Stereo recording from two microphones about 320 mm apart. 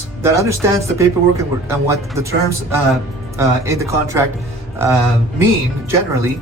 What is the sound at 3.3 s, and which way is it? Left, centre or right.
Speech, centre.